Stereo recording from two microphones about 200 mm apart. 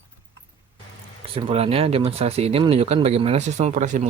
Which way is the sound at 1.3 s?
30° right (ahead or behind).